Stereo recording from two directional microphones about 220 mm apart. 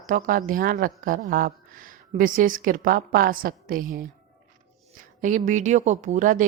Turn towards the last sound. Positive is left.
turn(degrees=-35)  # may be behind; listen again after turning